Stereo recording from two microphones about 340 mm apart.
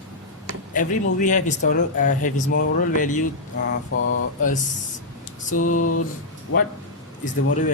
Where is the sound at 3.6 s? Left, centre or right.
Left.